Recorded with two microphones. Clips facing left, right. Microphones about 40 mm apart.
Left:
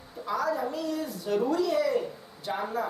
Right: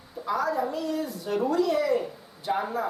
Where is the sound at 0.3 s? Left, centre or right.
Centre.